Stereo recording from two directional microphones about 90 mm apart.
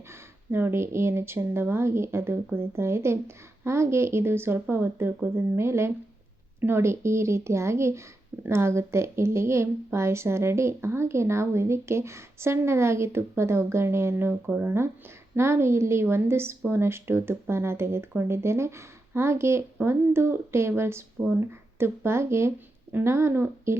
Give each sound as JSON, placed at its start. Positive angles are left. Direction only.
{"t": 0.1, "sound": "a woman's voice", "side_deg": -25}